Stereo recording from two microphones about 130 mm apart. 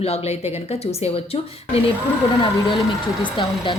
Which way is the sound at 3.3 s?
40° left (ahead or behind).